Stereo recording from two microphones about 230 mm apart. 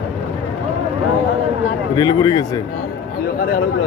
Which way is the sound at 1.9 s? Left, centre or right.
Centre.